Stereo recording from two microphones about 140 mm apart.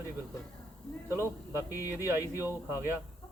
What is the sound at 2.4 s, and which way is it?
Speech, 15° right (ahead or behind).